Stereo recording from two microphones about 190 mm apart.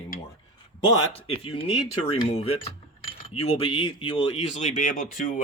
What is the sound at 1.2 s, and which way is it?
Speech, 30° left (ahead or behind).